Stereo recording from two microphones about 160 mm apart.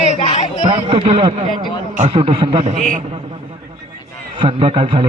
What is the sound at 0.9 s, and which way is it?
A man's voice, 35° right (ahead or behind).